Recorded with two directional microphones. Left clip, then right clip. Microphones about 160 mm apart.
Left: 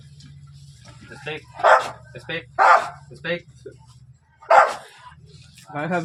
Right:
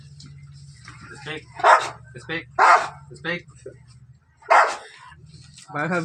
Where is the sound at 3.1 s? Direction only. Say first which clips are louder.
Left 1 dB; 15° left (ahead or behind).